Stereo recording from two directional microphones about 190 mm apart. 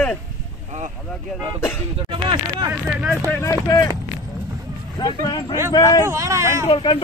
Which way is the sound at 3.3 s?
15° left (ahead or behind).